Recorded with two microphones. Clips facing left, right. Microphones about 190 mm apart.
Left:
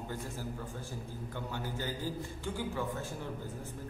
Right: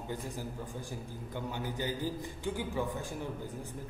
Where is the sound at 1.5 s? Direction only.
15° right (ahead or behind).